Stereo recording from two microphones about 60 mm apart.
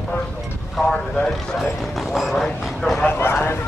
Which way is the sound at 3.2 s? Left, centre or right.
Left.